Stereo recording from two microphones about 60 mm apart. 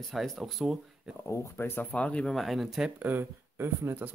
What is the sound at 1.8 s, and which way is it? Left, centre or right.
Speech, left.